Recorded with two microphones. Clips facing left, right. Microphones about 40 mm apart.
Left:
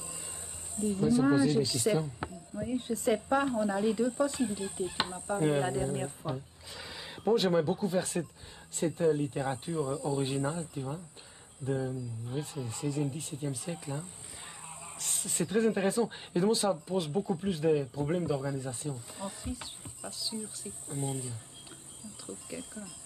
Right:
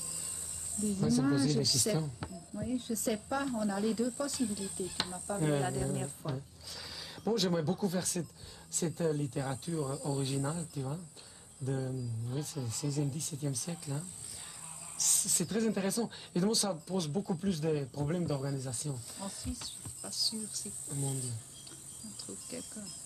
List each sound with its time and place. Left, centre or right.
0.7 s speech: left